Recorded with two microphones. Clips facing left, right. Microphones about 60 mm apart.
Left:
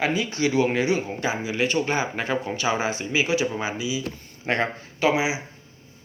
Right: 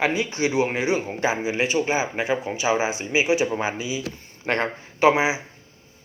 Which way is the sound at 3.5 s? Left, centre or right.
Right.